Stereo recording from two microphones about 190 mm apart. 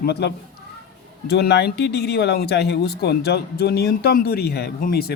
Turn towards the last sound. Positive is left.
turn(degrees=55)  # may be behind; listen again after turning